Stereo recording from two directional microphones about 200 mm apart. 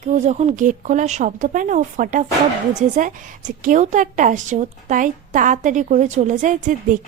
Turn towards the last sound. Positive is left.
turn(degrees=-40)  # may be behind; listen again after turning